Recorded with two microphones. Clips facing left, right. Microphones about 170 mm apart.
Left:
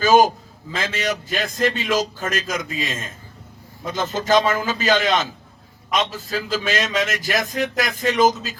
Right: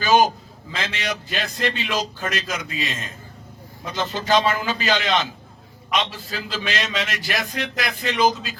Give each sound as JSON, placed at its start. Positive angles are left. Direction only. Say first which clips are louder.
{"t": 0.0, "sound": "a man's voice", "louder": "left 3 dB", "side_deg": 45}